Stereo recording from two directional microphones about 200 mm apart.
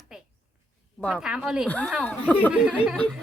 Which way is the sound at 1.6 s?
5° left (ahead or behind).